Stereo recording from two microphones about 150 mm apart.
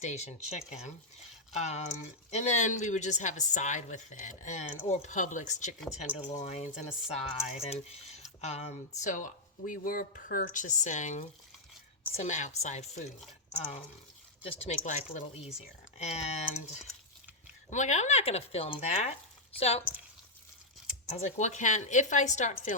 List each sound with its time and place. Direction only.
0.0 s speech: 50° left (ahead or behind)
14.4 s speech: 50° left (ahead or behind)
17.7 s speech: 55° left (ahead or behind)
21.1 s speech: 45° left (ahead or behind)